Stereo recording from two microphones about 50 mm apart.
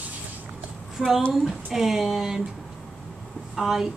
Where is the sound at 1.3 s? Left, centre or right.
Centre.